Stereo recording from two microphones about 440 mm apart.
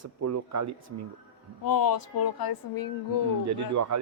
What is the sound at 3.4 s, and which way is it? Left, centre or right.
Speech, right.